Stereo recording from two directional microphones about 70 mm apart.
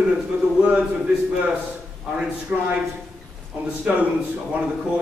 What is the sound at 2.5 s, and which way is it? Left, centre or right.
A man's voice, centre.